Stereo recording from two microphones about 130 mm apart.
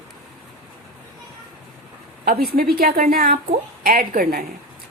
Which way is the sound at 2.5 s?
90° right.